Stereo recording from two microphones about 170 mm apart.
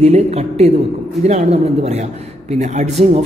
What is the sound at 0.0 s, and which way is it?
A man's voice, 35° right (ahead or behind).